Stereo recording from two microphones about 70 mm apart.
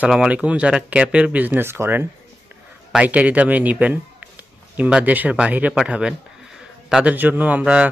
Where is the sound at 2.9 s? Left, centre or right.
Right.